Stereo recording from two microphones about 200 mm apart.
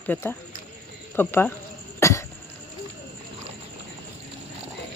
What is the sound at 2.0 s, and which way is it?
Cough, 15° left (ahead or behind).